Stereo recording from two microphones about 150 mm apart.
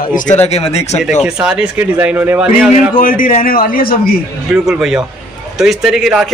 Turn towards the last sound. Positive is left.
turn(degrees=-5)  # may be behind; listen again after turning